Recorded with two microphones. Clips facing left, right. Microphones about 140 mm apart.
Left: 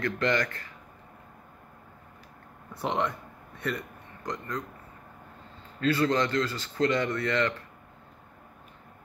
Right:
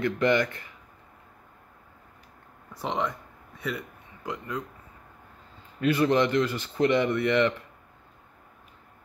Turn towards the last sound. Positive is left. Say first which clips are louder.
# right 4 dB
turn(degrees=-20)  # may be behind; listen again after turning